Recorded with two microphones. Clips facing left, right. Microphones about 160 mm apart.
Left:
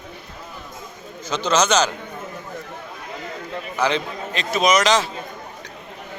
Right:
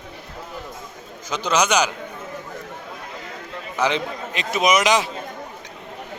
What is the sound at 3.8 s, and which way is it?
A man's voice, 15° right (ahead or behind).